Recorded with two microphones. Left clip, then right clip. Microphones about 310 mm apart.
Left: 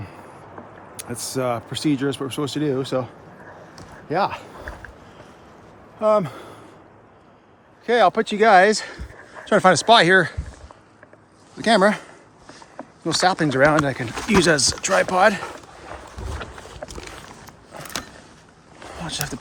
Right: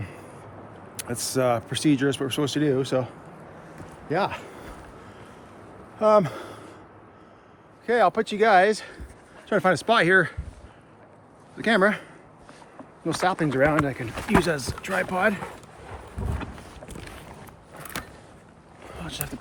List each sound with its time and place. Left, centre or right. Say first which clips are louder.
1.0 s speech: right 1 dB; centre
4.1 s speech: left 4 dB; centre
6.0 s speech: even; centre
7.9 s speech: left 4 dB; left
11.5 s speech: left 4 dB; centre
13.1 s speech: left 5 dB; centre
18.9 s a sound: left 7 dB; left